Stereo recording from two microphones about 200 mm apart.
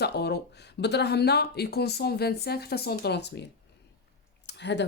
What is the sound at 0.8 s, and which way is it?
Speech, 55° left (ahead or behind).